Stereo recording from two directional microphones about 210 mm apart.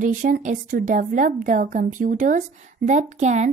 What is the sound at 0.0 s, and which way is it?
A woman's voice, 40° right (ahead or behind).